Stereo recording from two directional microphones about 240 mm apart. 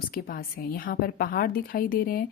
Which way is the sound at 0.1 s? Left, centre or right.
Left.